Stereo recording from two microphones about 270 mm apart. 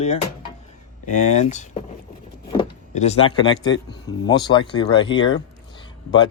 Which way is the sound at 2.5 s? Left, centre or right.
Left.